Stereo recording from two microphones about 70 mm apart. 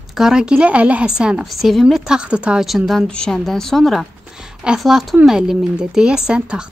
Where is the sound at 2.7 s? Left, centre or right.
Centre.